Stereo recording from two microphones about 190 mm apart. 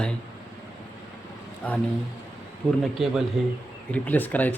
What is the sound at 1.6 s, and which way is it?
Speech, 5° left (ahead or behind).